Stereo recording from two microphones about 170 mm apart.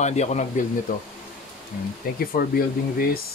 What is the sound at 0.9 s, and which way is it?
Speech, 55° left (ahead or behind).